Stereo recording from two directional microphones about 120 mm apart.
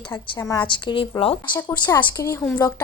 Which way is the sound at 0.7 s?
40° left (ahead or behind).